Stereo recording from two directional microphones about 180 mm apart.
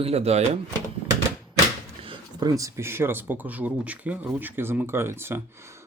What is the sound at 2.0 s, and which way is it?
Speech, 25° right (ahead or behind).